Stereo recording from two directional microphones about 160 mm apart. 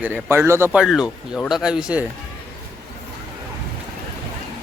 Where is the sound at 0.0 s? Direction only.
15° right (ahead or behind).